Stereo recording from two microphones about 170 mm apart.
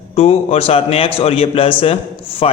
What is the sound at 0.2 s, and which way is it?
A man's voice, 35° left (ahead or behind).